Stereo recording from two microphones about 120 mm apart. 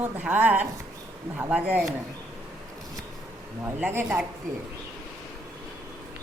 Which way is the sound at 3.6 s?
15° right (ahead or behind).